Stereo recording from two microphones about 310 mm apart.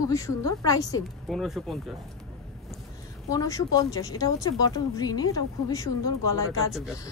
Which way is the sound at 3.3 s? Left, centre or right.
Centre.